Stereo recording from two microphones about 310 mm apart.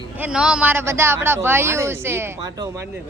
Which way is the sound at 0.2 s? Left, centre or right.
Centre.